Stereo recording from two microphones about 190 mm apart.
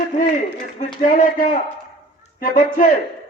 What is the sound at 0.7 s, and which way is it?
A man's voice, 45° left (ahead or behind).